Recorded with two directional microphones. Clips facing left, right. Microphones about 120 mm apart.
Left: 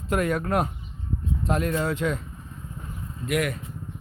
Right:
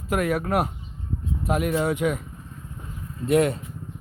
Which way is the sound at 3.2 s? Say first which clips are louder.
Right 6 dB; 30° right (ahead or behind).